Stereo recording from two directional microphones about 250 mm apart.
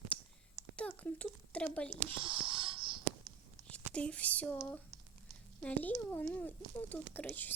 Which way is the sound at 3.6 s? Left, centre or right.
Centre.